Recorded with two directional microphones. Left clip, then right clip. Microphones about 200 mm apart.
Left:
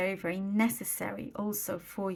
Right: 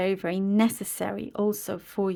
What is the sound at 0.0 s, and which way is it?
Speech, 45° right (ahead or behind).